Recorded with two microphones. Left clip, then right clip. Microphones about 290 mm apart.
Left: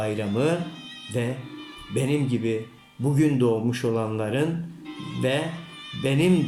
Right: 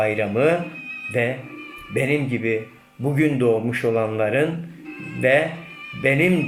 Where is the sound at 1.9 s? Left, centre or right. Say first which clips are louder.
Right 4 dB; right.